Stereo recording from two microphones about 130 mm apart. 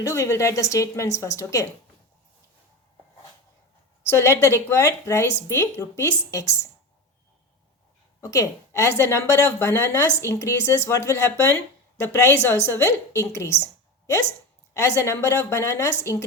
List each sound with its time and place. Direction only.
0.0 s a woman's voice: 20° left (ahead or behind)
4.0 s a woman's voice: 20° left (ahead or behind)
8.2 s a woman's voice: 25° left (ahead or behind)
14.7 s a woman's voice: 20° left (ahead or behind)